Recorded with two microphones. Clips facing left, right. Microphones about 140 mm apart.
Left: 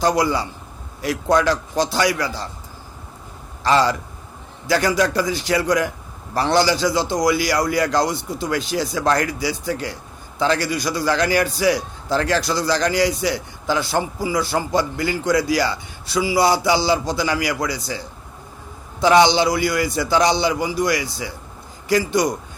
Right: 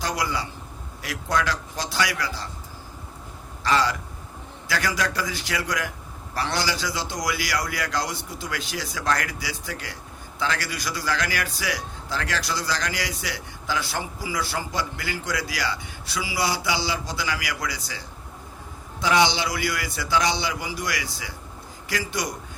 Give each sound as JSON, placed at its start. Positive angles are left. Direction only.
{"t": 0.0, "sound": "speech", "side_deg": 30}
{"t": 3.6, "sound": "a man's voice", "side_deg": 30}
{"t": 19.0, "sound": "a man's voice", "side_deg": 30}